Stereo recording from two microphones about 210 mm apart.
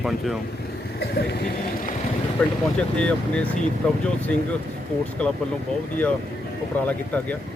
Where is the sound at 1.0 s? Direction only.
50° left (ahead or behind).